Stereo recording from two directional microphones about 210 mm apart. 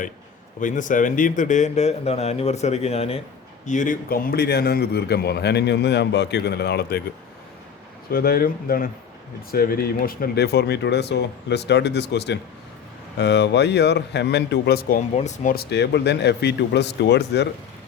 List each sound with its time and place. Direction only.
0.6 s a man's voice: 40° left (ahead or behind)
8.1 s a man's voice: 45° left (ahead or behind)
15.5 s a man's voice: 50° left (ahead or behind)